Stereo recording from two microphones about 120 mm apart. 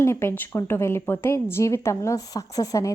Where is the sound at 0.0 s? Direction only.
20° left (ahead or behind).